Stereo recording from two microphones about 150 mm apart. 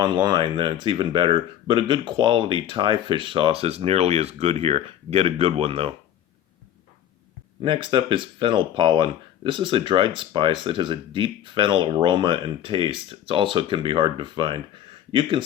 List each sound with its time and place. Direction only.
0.0 s speech: 30° right (ahead or behind)
7.6 s speech: 35° right (ahead or behind)